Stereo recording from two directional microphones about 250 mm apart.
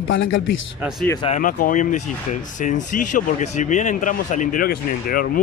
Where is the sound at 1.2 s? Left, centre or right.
Left.